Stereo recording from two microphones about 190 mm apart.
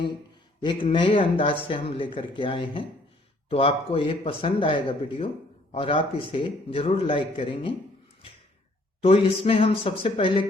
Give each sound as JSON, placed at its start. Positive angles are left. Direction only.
{"t": 0.6, "sound": "a man's voice", "side_deg": 25}
{"t": 9.0, "sound": "a man's voice", "side_deg": 30}